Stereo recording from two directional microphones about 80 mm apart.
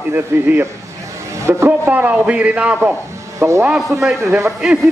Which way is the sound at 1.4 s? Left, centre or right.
Right.